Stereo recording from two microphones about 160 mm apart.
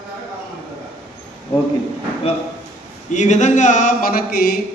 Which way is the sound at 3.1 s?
50° left (ahead or behind).